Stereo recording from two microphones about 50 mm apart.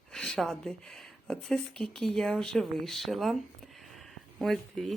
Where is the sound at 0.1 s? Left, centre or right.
Centre.